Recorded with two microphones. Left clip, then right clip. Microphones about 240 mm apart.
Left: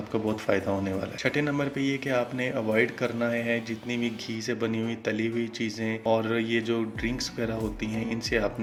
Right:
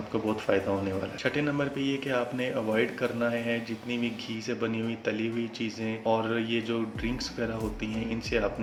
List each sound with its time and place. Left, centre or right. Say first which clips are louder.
0.1 s speech: left 1 dB; left